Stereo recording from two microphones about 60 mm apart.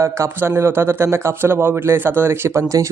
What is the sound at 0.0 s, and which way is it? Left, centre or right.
Speech, right.